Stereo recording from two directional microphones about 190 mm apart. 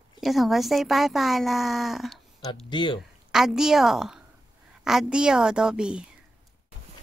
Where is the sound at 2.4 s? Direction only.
25° left (ahead or behind).